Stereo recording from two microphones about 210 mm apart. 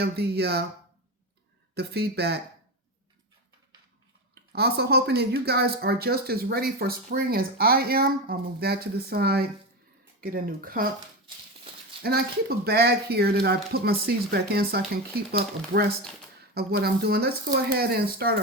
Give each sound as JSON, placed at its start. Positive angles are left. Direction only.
{"t": 0.0, "sound": "speech", "side_deg": -50}
{"t": 1.7, "sound": "speech", "side_deg": -50}
{"t": 4.5, "sound": "speech", "side_deg": -50}
{"t": 12.0, "sound": "speech", "side_deg": -50}